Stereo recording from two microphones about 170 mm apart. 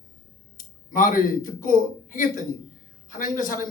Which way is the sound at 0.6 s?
50° left (ahead or behind).